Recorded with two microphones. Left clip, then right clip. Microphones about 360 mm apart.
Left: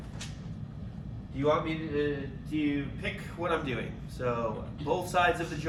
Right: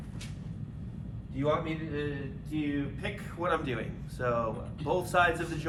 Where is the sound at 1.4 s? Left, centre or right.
Centre.